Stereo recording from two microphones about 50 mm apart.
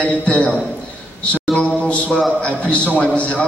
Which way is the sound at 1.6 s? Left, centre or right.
Left.